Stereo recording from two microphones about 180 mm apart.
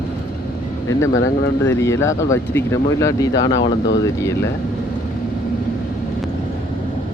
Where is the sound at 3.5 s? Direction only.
90° left.